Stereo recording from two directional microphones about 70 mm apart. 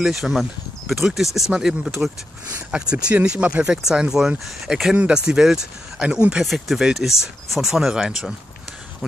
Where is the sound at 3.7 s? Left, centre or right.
Centre.